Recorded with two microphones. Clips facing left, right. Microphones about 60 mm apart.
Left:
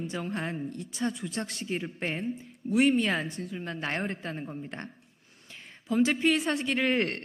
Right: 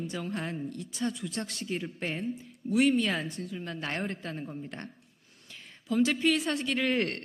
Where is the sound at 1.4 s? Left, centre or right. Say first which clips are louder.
Left 1 dB; left.